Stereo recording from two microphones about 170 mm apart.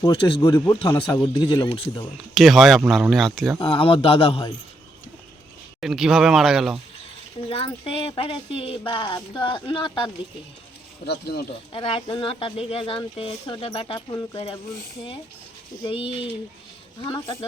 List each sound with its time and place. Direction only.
0.0 s speech: 30° left (ahead or behind)
2.3 s speech: centre (ahead or behind)
3.6 s speech: 30° left (ahead or behind)
5.8 s speech: centre (ahead or behind)
7.4 s speech: 35° left (ahead or behind)
11.0 s speech: 75° left (ahead or behind)
11.7 s speech: 35° left (ahead or behind)
15.8 s speech: 30° left (ahead or behind)